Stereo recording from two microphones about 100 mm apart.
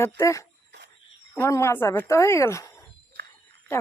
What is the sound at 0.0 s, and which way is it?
Speech, 30° left (ahead or behind).